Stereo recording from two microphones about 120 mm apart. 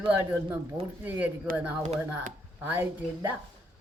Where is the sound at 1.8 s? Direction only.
90° right.